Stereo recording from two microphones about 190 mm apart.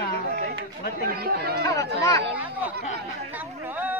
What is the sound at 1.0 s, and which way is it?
Speech, 55° right (ahead or behind).